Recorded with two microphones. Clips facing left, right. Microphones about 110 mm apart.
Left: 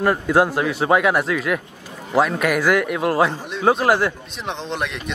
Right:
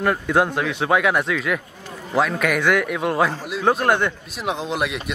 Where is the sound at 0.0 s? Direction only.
5° left (ahead or behind).